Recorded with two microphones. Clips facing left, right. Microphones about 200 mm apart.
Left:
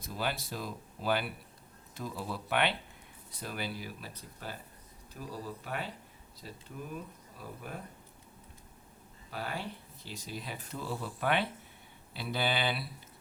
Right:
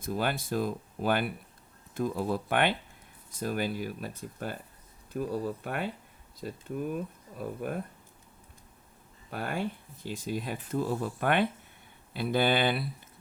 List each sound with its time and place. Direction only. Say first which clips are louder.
0.0 s speech: right 5 dB; 50° right (ahead or behind)
9.3 s speech: right 6 dB; 50° right (ahead or behind)